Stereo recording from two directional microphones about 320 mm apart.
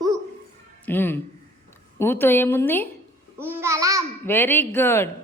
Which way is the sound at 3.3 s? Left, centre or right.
Centre.